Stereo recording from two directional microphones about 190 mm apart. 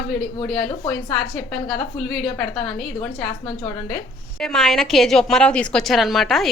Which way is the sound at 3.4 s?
20° left (ahead or behind).